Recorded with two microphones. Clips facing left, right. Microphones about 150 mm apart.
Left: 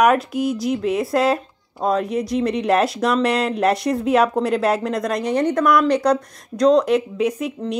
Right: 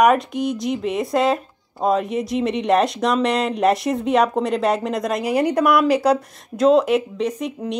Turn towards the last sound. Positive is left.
turn(degrees=10)  # may be behind; listen again after turning